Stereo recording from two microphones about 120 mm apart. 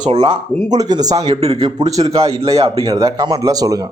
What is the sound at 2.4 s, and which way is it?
Speech, 55° right (ahead or behind).